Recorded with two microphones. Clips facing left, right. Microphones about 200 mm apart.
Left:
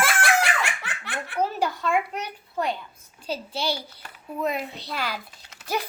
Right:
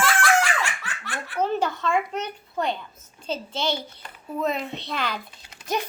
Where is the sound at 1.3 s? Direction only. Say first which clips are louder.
Right 2 dB; 10° left (ahead or behind).